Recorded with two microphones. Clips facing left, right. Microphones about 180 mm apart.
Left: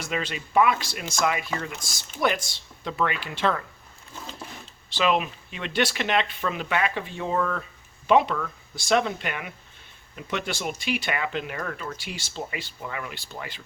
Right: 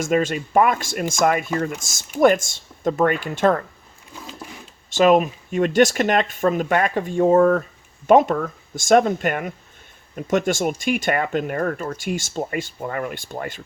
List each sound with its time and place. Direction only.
0.0 s speech: 45° right (ahead or behind)
4.9 s speech: 45° right (ahead or behind)